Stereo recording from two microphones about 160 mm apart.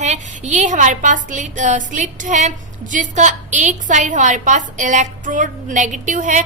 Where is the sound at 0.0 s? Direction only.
50° right (ahead or behind).